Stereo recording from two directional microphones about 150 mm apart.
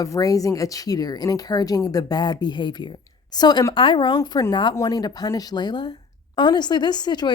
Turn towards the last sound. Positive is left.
turn(degrees=30)  # may be behind; listen again after turning